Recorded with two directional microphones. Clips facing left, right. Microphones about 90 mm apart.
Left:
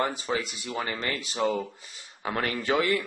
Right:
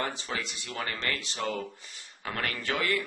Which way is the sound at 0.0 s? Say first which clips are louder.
Left 5 dB; 10° left (ahead or behind).